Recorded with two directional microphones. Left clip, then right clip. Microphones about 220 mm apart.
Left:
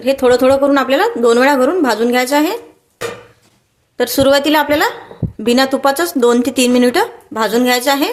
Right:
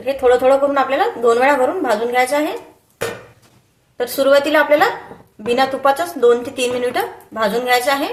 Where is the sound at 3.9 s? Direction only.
40° left (ahead or behind).